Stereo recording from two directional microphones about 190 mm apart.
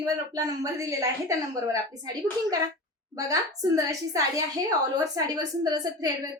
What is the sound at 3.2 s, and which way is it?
A woman's voice, 20° right (ahead or behind).